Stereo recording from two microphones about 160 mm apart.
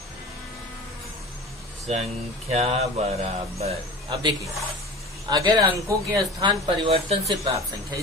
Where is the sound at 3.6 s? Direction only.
40° right (ahead or behind).